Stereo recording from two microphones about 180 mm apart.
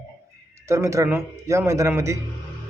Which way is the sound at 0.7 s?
15° right (ahead or behind).